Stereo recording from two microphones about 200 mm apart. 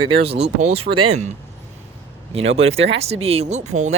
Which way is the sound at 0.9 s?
45° right (ahead or behind).